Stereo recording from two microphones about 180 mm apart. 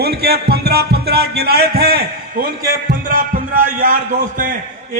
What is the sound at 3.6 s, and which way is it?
Speech, 45° right (ahead or behind).